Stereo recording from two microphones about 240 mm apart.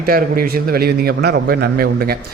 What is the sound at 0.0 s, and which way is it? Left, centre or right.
A man's voice, right.